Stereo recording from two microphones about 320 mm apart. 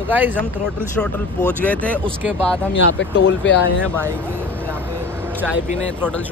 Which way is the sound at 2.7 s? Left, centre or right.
Left.